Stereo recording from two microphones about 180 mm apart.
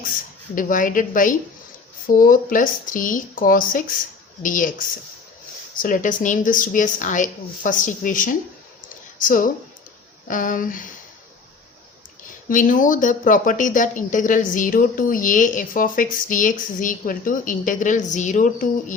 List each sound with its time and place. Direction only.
0.5 s speech: 50° left (ahead or behind)
5.7 s speech: 50° left (ahead or behind)
12.5 s speech: 45° left (ahead or behind)